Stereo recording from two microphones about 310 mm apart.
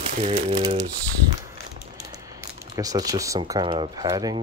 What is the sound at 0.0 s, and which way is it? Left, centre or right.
Speech, centre.